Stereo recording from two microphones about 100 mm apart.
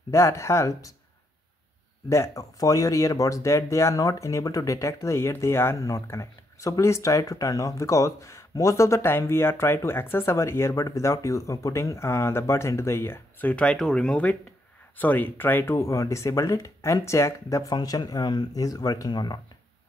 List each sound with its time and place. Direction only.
0.1 s speech: 30° left (ahead or behind)
2.0 s speech: 30° left (ahead or behind)
15.7 s speech: 35° left (ahead or behind)